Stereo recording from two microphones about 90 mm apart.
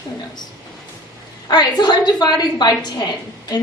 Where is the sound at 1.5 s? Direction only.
50° left (ahead or behind).